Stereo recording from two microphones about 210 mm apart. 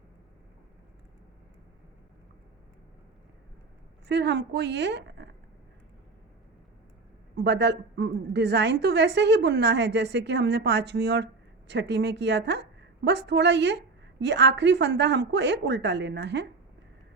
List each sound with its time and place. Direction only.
4.1 s a woman's voice: 55° right (ahead or behind)
7.3 s a woman's voice: 55° right (ahead or behind)